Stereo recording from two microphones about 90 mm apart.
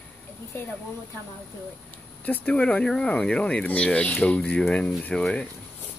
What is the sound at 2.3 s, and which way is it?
Speech, 20° left (ahead or behind).